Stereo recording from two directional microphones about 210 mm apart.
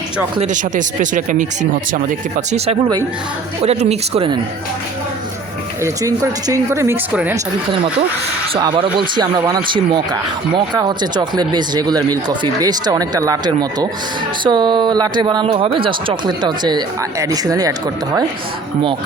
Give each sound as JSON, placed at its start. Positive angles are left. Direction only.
{"t": 0.3, "sound": "speech", "side_deg": -35}
{"t": 3.6, "sound": "speech", "side_deg": -30}
{"t": 5.8, "sound": "speech", "side_deg": -15}
{"t": 8.5, "sound": "speech", "side_deg": -20}